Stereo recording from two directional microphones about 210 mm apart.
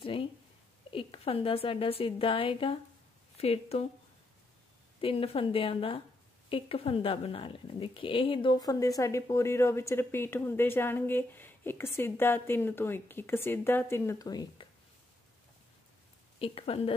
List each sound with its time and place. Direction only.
0.0 s a sound: 25° left (ahead or behind)
0.9 s a woman's voice: 25° left (ahead or behind)
5.0 s a woman's voice: 25° left (ahead or behind)
16.3 s a woman's voice: 25° left (ahead or behind)